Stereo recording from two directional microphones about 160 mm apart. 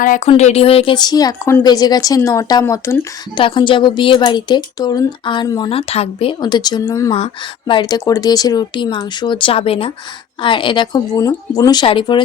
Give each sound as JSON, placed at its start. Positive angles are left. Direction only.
{"t": 0.3, "sound": "a woman's voice", "side_deg": 40}
{"t": 3.3, "sound": "a woman's voice", "side_deg": 30}